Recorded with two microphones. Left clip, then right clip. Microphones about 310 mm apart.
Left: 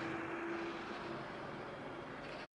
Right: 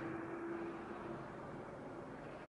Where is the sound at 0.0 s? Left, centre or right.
Centre.